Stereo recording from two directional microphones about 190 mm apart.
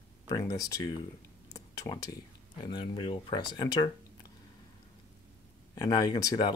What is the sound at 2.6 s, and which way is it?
Speech, 25° left (ahead or behind).